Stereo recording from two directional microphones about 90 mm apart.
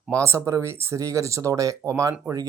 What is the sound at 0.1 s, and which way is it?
Speech, 35° right (ahead or behind).